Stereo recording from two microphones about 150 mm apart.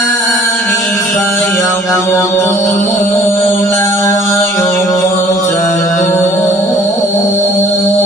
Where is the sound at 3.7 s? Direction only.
20° left (ahead or behind).